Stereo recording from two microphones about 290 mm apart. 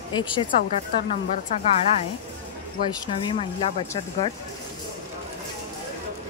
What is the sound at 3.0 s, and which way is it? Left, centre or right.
Speech, centre.